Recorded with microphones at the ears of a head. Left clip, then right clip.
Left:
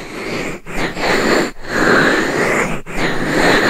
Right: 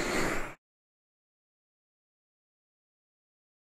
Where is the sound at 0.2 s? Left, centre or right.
Left.